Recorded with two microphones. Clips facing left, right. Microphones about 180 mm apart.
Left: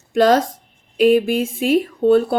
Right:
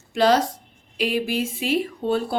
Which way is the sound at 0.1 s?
50° left (ahead or behind).